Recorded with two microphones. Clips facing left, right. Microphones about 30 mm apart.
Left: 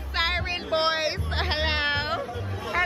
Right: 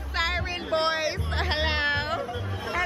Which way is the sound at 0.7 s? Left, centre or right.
Left.